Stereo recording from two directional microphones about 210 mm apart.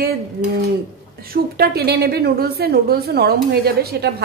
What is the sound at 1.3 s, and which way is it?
Speech, 50° right (ahead or behind).